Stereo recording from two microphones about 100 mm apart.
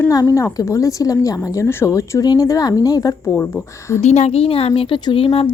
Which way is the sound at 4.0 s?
90° left.